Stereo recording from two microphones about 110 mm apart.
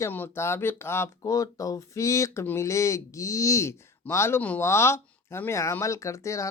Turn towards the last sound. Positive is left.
turn(degrees=30)  # may be behind; listen again after turning